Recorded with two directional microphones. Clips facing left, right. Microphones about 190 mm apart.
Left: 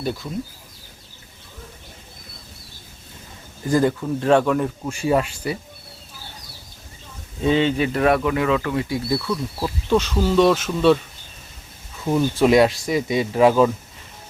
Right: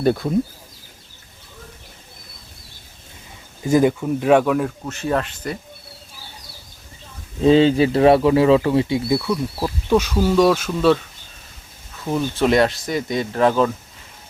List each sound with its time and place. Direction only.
0.0 s speech: 55° right (ahead or behind)
3.6 s speech: 15° right (ahead or behind)
4.9 s speech: 10° left (ahead or behind)
7.4 s speech: 35° right (ahead or behind)
9.1 s speech: 10° right (ahead or behind)
12.0 s speech: centre (ahead or behind)